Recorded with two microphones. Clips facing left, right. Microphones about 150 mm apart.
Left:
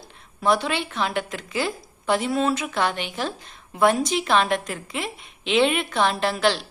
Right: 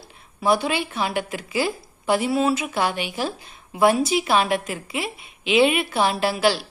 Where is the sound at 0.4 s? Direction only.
10° right (ahead or behind).